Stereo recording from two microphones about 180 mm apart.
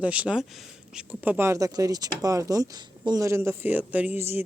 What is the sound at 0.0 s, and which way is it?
Speech, 5° right (ahead or behind).